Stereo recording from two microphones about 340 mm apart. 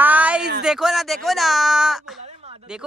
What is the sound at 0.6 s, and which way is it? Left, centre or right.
Speech, centre.